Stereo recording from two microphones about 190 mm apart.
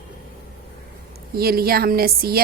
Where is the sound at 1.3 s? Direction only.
55° right (ahead or behind).